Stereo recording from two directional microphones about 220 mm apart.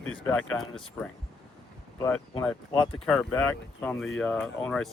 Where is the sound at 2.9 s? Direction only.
5° left (ahead or behind).